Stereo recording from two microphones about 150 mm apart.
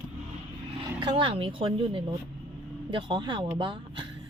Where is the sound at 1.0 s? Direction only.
30° right (ahead or behind).